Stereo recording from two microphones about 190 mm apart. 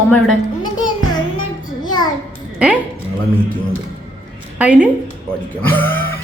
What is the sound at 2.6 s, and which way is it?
Speech, 5° right (ahead or behind).